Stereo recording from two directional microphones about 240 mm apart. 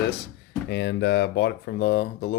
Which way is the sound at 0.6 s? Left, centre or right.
Left.